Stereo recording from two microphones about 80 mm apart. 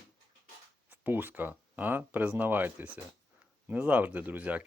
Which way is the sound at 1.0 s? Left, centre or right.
Right.